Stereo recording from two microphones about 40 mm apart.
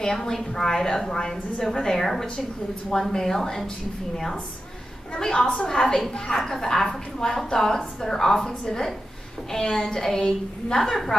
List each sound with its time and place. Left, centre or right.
0.0 s a woman's voice: centre
5.1 s a woman's voice: centre
10.0 s a woman's voice: centre